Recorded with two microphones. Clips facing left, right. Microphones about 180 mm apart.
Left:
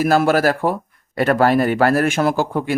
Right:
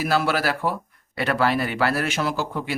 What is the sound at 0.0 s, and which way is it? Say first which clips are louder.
Speech: left 7 dB; 45° left (ahead or behind).